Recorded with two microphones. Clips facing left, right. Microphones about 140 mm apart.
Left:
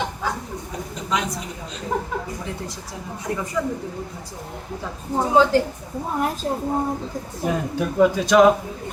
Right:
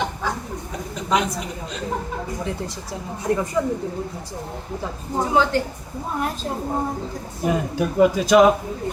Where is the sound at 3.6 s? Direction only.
35° right (ahead or behind).